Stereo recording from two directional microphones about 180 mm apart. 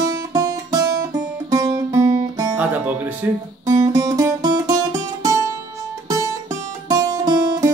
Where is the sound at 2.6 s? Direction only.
10° right (ahead or behind).